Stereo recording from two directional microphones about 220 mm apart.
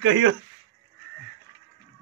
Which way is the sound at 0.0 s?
60° right (ahead or behind).